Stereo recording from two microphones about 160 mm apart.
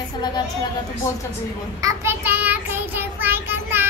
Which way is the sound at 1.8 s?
15° right (ahead or behind).